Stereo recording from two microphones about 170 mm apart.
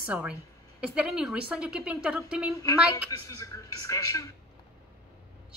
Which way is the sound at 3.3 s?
20° left (ahead or behind).